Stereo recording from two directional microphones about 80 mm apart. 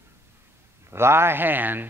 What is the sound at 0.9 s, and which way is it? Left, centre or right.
Speech, right.